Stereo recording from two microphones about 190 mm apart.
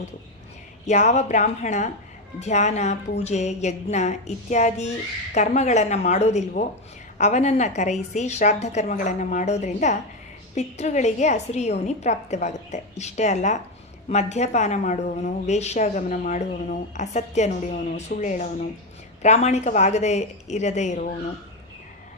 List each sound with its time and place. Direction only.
0.9 s a woman's voice: 35° left (ahead or behind)